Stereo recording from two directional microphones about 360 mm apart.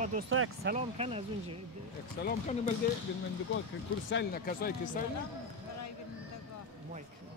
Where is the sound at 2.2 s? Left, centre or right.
Left.